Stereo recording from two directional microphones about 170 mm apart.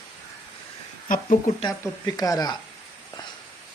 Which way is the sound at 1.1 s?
50° left (ahead or behind).